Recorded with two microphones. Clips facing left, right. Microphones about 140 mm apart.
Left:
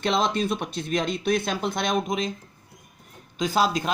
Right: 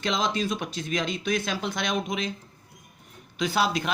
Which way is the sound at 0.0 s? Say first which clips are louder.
Left 3 dB; 55° left (ahead or behind).